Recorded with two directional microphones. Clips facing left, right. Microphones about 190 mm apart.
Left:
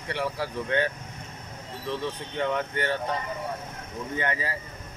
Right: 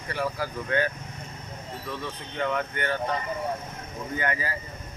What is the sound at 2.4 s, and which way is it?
Speech, 30° left (ahead or behind).